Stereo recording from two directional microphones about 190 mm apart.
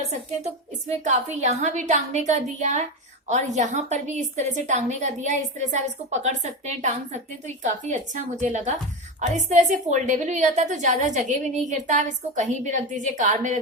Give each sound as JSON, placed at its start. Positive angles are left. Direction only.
{"t": 1.0, "sound": "a woman's voice", "side_deg": -40}